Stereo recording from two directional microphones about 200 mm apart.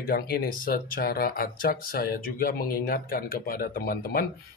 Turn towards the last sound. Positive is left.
turn(degrees=45)  # may be behind; listen again after turning